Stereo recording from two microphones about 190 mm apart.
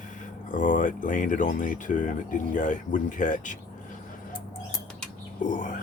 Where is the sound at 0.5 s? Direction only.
45° left (ahead or behind).